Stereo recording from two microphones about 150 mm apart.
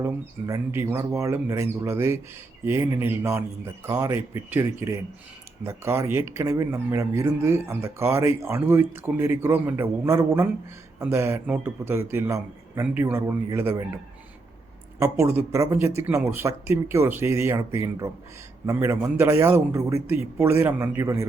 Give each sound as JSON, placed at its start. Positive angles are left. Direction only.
{"t": 0.0, "sound": "speech", "side_deg": -20}
{"t": 15.2, "sound": "speech", "side_deg": -20}